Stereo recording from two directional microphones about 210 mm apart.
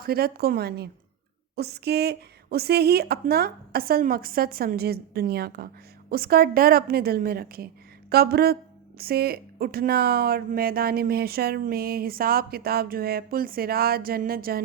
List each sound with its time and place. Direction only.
0.0 s a woman's voice: 45° right (ahead or behind)